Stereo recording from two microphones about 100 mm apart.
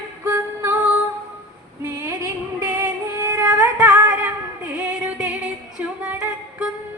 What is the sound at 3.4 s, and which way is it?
Music, 25° right (ahead or behind).